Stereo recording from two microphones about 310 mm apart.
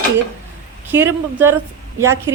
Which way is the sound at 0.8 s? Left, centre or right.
Centre.